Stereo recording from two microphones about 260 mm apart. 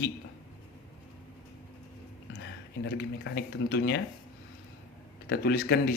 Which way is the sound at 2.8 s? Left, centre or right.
Left.